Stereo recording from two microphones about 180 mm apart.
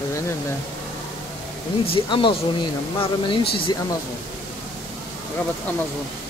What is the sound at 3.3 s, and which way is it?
Speech, 30° left (ahead or behind).